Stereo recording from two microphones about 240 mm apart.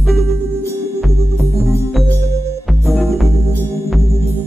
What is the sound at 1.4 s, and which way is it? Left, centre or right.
Organ, centre.